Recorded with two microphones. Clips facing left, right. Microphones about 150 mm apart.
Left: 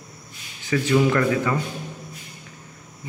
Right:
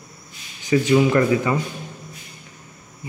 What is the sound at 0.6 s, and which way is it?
Speech, 20° right (ahead or behind).